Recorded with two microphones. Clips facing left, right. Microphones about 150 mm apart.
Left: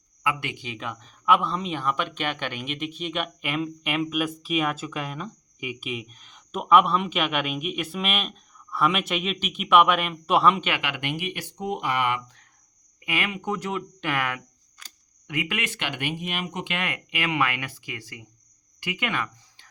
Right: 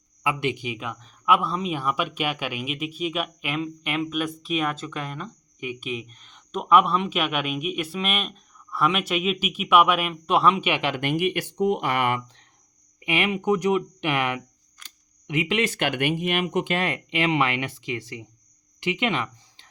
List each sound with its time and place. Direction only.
0.2 s speech: 20° right (ahead or behind)
0.9 s speech: centre (ahead or behind)
10.8 s speech: 35° right (ahead or behind)
11.5 s speech: 70° right (ahead or behind); by 12.2 s 50° right (ahead or behind)
13.0 s speech: 20° right (ahead or behind)
15.6 s speech: 45° right (ahead or behind); by 16.6 s 60° right (ahead or behind)
16.6 s speech: 35° right (ahead or behind)